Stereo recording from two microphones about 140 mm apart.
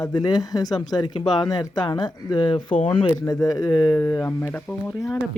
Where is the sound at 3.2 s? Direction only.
25° left (ahead or behind).